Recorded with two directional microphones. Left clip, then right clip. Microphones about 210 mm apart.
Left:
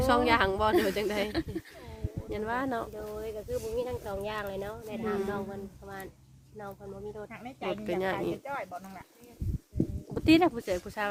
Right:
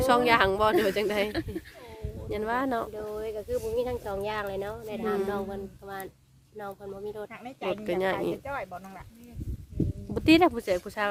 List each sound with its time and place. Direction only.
0.0 s speech: 30° right (ahead or behind)
2.3 s speech: 25° right (ahead or behind)
2.9 s a sound: 50° right (ahead or behind)
3.8 s speech: 55° right (ahead or behind)
7.8 s speech: 25° right (ahead or behind)
8.4 s speech: 45° right (ahead or behind)
10.2 s speech: 25° right (ahead or behind)